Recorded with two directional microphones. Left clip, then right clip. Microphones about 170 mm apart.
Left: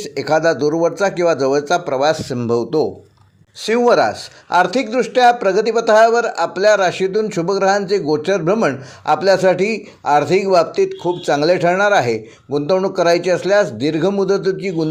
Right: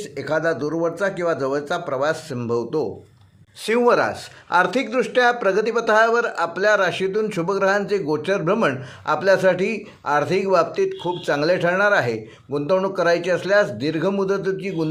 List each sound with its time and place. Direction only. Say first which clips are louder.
0.0 s a man's voice: left 7 dB; 45° left (ahead or behind)
3.6 s speech: left 4 dB; 25° left (ahead or behind)